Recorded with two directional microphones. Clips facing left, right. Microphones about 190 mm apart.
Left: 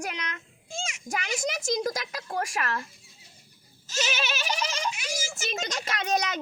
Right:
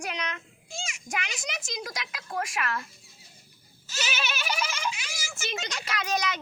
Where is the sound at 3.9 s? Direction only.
40° left (ahead or behind).